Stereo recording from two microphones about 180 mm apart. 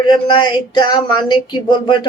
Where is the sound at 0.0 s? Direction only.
25° left (ahead or behind).